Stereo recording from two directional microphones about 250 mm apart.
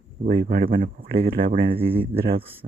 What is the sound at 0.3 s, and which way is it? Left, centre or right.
Speech, right.